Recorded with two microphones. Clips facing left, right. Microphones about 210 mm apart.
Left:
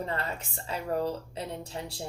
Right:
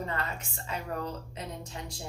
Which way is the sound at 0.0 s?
35° left (ahead or behind).